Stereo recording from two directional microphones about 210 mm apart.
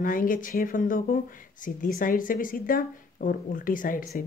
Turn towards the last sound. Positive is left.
turn(degrees=40)  # may be behind; listen again after turning